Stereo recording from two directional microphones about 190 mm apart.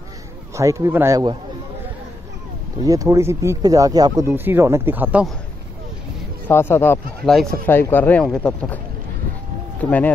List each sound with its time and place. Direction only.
0.6 s speech: 15° right (ahead or behind)
2.8 s speech: 20° right (ahead or behind)
6.5 s speech: 10° left (ahead or behind)
9.8 s speech: 10° left (ahead or behind)